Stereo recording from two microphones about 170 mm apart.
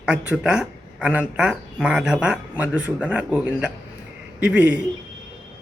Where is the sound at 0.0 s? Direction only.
5° right (ahead or behind).